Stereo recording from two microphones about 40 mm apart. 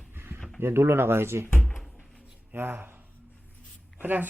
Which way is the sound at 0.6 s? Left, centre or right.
Right.